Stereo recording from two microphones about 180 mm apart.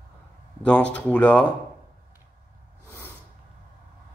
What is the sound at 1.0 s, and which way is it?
Speech, 10° left (ahead or behind).